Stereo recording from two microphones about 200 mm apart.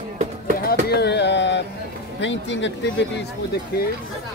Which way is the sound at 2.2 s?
65° left (ahead or behind).